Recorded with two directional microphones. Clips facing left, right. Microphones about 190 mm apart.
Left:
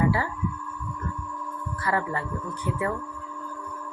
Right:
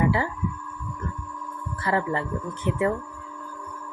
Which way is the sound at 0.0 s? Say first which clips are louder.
Right 1 dB; 20° right (ahead or behind).